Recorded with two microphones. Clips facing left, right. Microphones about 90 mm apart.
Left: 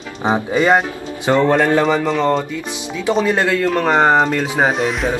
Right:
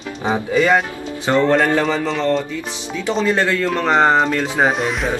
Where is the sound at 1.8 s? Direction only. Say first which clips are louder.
Left 3 dB; 5° left (ahead or behind).